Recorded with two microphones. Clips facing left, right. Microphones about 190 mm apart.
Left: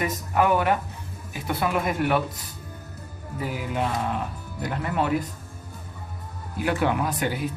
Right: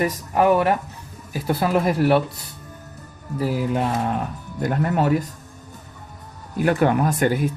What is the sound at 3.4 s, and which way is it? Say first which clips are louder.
Speech: right 6 dB; 45° right (ahead or behind).